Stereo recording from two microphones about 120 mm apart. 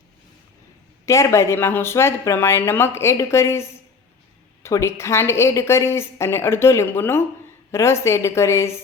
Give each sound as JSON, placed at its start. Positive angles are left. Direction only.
{"t": 1.0, "sound": "speech", "side_deg": 25}